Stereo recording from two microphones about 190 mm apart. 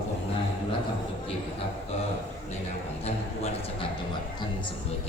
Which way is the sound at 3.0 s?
35° left (ahead or behind).